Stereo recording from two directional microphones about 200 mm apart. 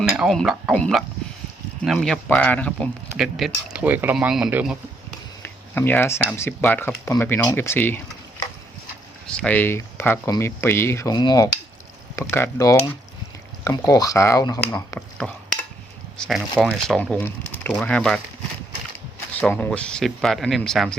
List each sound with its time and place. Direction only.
0.2 s speech: centre (ahead or behind)
5.4 s a sound: 10° left (ahead or behind)
6.3 s speech: 10° left (ahead or behind)
9.2 s speech: 5° left (ahead or behind)
16.1 s speech: 5° left (ahead or behind)
16.6 s speech: 5° right (ahead or behind)
17.0 s speech: 10° left (ahead or behind)
19.4 s speech: 5° left (ahead or behind)